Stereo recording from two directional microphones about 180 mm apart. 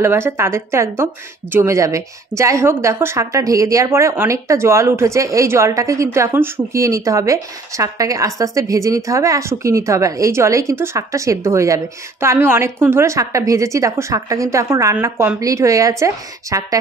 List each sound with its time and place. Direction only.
0.0 s a woman's voice: 15° right (ahead or behind)